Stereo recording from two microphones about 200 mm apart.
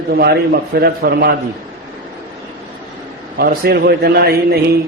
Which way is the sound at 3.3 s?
50° right (ahead or behind).